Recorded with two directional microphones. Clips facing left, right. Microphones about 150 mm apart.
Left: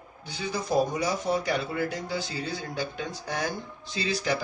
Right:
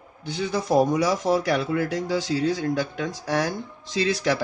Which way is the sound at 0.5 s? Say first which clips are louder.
Right 5 dB; 75° right (ahead or behind).